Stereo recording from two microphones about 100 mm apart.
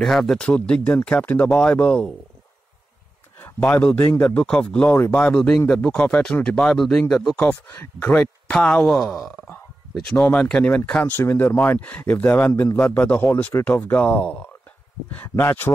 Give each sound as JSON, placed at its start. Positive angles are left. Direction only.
{"t": 0.0, "sound": "speech", "side_deg": 5}
{"t": 3.3, "sound": "speech", "side_deg": 20}
{"t": 7.3, "sound": "speech", "side_deg": 20}
{"t": 11.1, "sound": "speech", "side_deg": 20}